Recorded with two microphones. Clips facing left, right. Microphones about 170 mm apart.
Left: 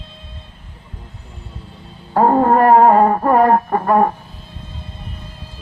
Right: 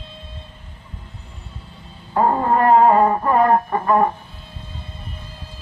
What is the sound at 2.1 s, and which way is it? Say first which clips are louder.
Music: left 5 dB; 45° left (ahead or behind).